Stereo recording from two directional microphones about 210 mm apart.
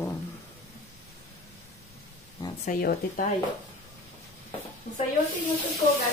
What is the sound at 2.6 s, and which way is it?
Speech, 40° left (ahead or behind).